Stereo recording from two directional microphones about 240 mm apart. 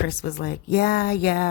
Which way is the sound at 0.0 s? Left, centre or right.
Left.